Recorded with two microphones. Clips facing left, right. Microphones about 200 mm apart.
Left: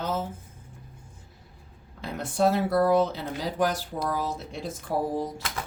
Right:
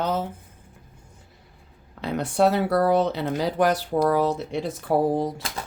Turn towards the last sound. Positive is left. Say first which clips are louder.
# right 6 dB
turn(degrees=-70)  # may be behind; listen again after turning